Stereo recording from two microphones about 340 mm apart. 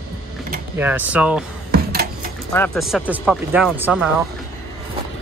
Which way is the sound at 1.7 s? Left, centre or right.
Right.